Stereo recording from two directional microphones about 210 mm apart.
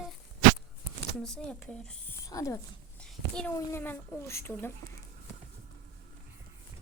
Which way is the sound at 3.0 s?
5° left (ahead or behind).